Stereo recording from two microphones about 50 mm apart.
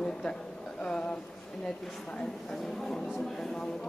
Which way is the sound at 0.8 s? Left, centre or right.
Centre.